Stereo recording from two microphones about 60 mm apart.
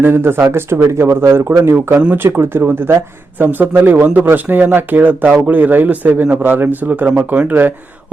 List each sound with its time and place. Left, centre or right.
0.0 s speech: right